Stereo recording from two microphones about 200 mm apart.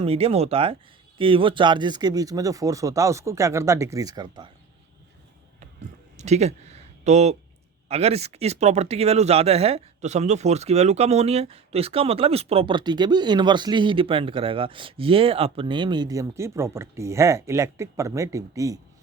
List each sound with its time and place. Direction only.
0.0 s speech: 30° right (ahead or behind)
6.1 s a sound: 35° right (ahead or behind)
7.9 s speech: 30° right (ahead or behind); by 18.8 s 15° right (ahead or behind)